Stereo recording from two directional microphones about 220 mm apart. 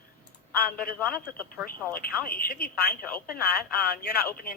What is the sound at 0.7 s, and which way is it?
Speech, 40° left (ahead or behind).